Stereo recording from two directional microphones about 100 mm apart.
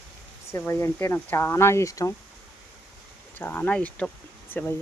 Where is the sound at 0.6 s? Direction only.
25° left (ahead or behind).